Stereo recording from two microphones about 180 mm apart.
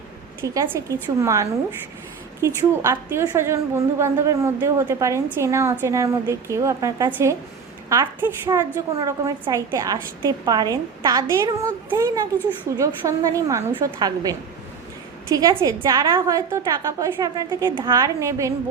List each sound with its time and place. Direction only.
0.4 s a woman's voice: 20° right (ahead or behind)
2.6 s a woman's voice: 15° right (ahead or behind)
15.4 s a woman's voice: 20° right (ahead or behind)